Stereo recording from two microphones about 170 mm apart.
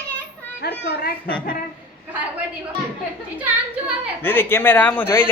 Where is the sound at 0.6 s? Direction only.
65° left (ahead or behind).